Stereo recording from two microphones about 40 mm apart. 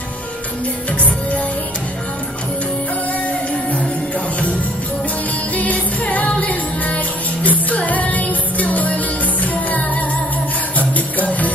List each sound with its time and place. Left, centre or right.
5.6 s music: left
10.8 s music: left